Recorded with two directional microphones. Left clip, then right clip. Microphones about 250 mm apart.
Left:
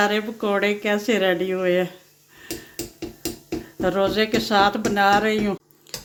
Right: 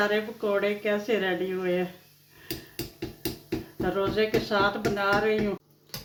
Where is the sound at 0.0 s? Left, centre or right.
Left.